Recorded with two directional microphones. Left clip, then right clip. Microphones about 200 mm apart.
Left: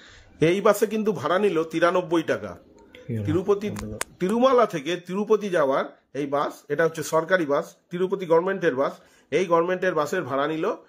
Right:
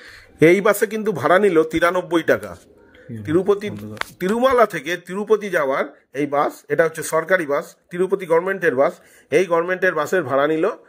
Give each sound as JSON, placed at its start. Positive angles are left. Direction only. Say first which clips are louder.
{"t": 0.1, "sound": "speech", "louder": "right 8 dB", "side_deg": -35}